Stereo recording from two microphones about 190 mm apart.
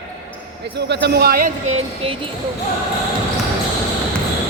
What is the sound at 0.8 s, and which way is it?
Speech, 65° right (ahead or behind).